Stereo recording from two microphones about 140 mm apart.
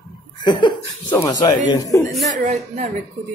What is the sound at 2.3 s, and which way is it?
Speech, 60° right (ahead or behind).